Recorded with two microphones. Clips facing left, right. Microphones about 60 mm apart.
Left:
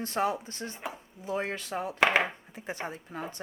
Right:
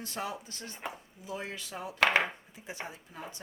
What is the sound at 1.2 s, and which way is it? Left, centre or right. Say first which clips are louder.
Speech: left 7 dB; left.